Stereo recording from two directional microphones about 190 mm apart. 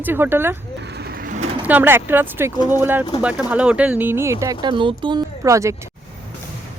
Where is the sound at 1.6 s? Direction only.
10° right (ahead or behind).